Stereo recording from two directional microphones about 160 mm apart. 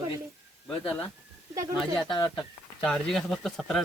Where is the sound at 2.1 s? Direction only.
30° left (ahead or behind).